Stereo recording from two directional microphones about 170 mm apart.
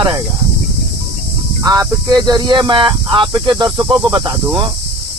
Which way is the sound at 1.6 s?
20° right (ahead or behind).